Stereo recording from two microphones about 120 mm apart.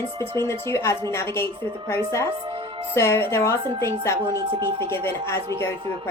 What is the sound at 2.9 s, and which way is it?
Speech, 20° left (ahead or behind).